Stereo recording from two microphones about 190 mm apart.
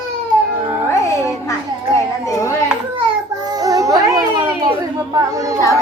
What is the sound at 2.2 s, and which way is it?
Speech, 15° left (ahead or behind).